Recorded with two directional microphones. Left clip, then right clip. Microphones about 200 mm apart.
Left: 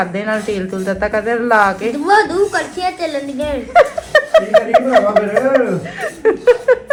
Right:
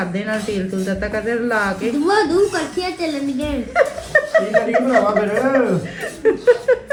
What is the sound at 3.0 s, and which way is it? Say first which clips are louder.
Speech: left 3 dB; 35° right (ahead or behind).